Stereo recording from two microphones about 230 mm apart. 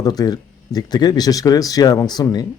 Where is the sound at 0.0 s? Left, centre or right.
Centre.